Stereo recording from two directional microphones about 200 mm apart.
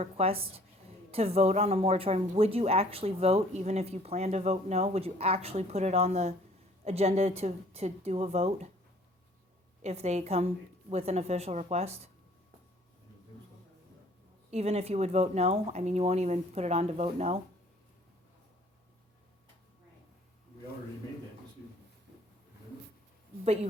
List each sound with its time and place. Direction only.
0.0 s a woman's voice: 30° right (ahead or behind)
9.8 s speech: 35° right (ahead or behind)
14.5 s speech: 30° right (ahead or behind)